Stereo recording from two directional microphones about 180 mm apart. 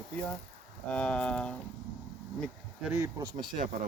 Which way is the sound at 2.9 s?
15° right (ahead or behind).